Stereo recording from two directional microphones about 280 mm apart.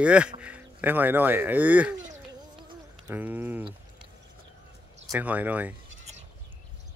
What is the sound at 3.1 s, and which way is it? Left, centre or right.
Speech, centre.